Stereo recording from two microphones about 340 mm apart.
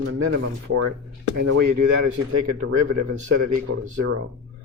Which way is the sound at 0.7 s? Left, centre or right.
Right.